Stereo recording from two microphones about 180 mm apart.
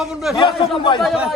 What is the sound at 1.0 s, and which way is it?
Speech, 5° right (ahead or behind).